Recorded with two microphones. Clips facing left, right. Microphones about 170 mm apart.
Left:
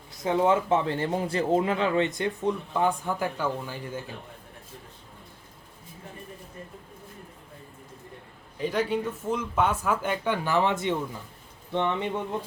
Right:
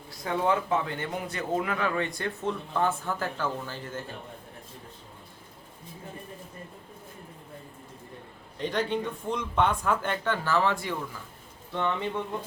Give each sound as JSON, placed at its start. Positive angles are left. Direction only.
{"t": 0.3, "sound": "speech", "side_deg": 20}
{"t": 8.5, "sound": "speech", "side_deg": 5}